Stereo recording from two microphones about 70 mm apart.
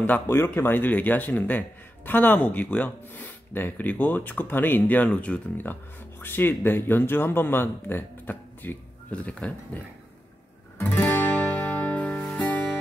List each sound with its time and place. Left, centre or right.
0.0 s speech: left
5.7 s speech: left
9.1 s speech: centre
11.0 s music: left
12.0 s music: centre